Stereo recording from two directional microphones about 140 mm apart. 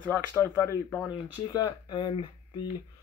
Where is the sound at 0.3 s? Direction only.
15° left (ahead or behind).